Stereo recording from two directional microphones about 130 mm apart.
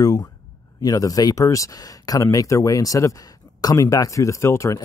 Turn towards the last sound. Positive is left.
turn(degrees=20)  # may be behind; listen again after turning